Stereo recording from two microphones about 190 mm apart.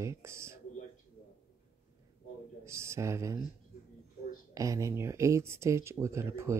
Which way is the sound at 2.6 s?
15° right (ahead or behind).